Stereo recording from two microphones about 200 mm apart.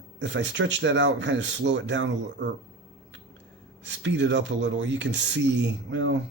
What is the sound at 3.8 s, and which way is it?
Speech, 65° right (ahead or behind).